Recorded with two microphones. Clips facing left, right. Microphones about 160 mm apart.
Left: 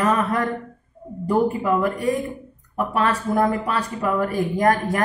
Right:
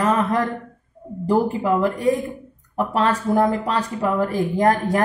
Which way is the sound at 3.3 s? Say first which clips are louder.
Right 2 dB; 30° right (ahead or behind).